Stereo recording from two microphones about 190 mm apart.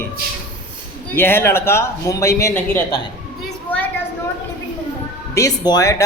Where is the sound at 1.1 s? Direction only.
10° left (ahead or behind).